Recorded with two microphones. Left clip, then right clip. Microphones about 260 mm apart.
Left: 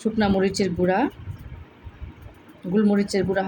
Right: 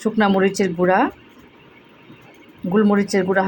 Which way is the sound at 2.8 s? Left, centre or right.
Centre.